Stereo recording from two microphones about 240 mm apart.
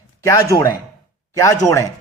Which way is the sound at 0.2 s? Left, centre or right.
Centre.